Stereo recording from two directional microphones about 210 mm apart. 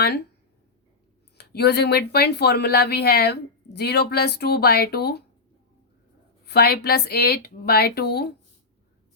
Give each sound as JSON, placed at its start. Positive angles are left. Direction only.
{"t": 1.4, "sound": "speech", "side_deg": 50}
{"t": 6.4, "sound": "speech", "side_deg": 50}